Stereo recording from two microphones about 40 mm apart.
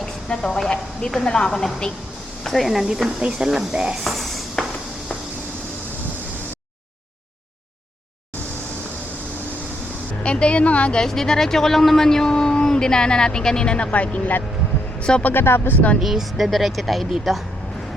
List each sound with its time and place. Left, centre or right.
0.0 s a sound: centre
1.2 s speech: centre
2.4 s a woman's voice: centre
2.8 s speech: centre
4.0 s a sound: centre
10.2 s a woman's voice: left
10.9 s speech: centre; by 14.3 s left
15.2 s speech: left
16.0 s speech: centre